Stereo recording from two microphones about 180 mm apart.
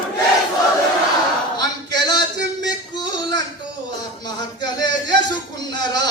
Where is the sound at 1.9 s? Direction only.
25° left (ahead or behind).